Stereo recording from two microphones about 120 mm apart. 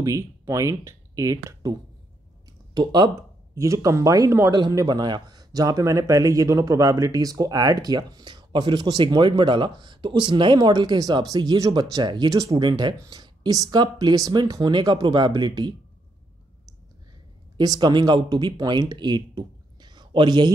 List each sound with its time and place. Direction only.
0.0 s a man's voice: 25° right (ahead or behind)
12.5 s a man's voice: 40° right (ahead or behind)
17.6 s speech: 35° right (ahead or behind)